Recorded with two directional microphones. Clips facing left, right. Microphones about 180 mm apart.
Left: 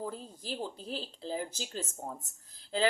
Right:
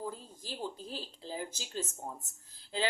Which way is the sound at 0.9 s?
35° left (ahead or behind).